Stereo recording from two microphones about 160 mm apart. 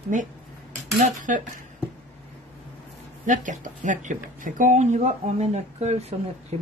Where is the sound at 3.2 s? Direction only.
50° right (ahead or behind).